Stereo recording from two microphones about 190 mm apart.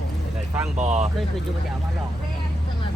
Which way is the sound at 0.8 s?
35° right (ahead or behind).